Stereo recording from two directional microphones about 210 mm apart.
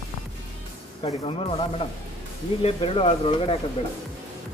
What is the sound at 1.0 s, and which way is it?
Speech, 25° left (ahead or behind).